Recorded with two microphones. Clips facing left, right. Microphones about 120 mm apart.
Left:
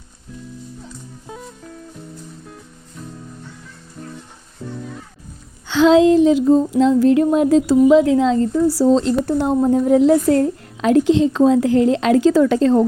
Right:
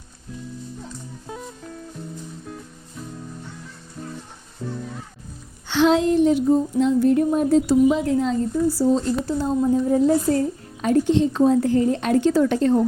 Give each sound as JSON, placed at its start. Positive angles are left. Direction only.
{"t": 1.3, "sound": "music", "side_deg": 0}
{"t": 3.0, "sound": "music", "side_deg": -5}
{"t": 6.1, "sound": "a woman's voice", "side_deg": 90}
{"t": 9.2, "sound": "a woman's voice", "side_deg": 65}